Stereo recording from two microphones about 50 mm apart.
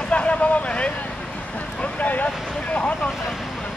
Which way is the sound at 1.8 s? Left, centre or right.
Left.